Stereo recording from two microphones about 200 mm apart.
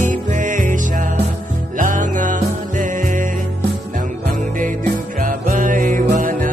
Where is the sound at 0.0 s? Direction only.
40° right (ahead or behind).